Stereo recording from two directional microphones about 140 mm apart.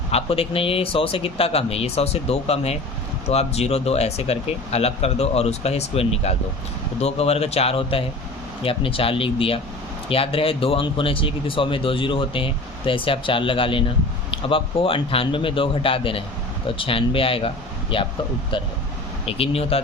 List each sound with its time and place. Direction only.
0.1 s speech: 45° left (ahead or behind)